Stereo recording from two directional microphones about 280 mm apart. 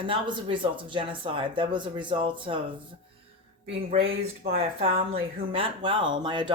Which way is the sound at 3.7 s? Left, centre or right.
Right.